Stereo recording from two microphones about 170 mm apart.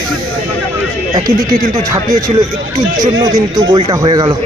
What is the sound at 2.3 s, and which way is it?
Speech, 35° right (ahead or behind).